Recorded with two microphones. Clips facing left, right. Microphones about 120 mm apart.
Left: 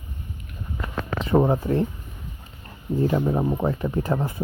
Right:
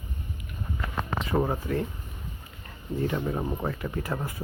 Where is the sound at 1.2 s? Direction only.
25° left (ahead or behind).